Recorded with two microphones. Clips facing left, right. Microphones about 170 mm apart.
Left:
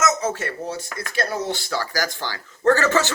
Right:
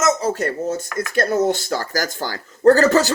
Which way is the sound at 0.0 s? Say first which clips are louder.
Right 4 dB; 30° right (ahead or behind).